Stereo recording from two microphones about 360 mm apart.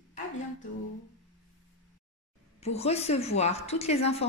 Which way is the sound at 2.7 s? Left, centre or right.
Centre.